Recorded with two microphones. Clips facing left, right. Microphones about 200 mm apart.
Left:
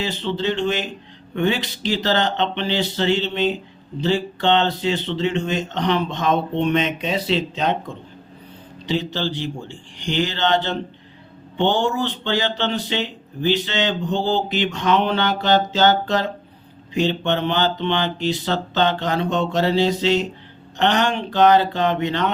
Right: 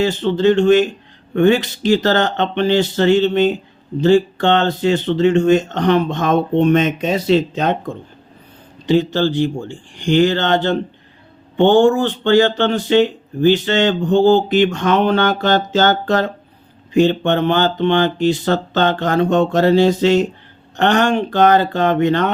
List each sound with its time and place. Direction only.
0.0 s speech: 50° right (ahead or behind)
8.9 s speech: 50° right (ahead or behind)